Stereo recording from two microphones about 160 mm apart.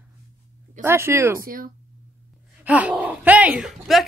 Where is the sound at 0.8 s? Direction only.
15° right (ahead or behind).